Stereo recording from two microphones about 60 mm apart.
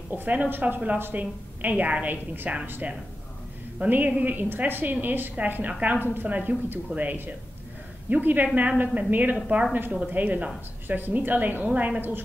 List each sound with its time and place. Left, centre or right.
0.1 s a woman's voice: right